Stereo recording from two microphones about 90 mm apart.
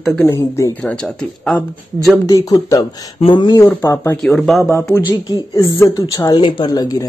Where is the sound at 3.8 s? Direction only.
30° left (ahead or behind); by 6.4 s 45° left (ahead or behind).